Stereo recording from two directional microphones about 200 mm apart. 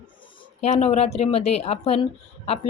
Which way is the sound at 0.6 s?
35° left (ahead or behind).